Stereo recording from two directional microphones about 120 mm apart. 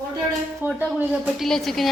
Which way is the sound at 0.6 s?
15° right (ahead or behind).